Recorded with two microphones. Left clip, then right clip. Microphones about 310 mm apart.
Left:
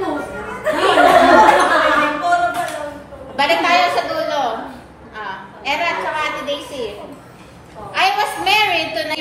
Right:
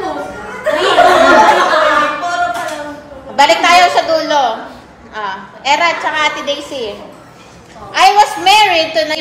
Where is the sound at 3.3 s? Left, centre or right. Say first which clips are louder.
Right 6 dB; right.